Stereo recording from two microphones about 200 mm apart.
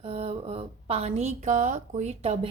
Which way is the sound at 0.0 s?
30° right (ahead or behind).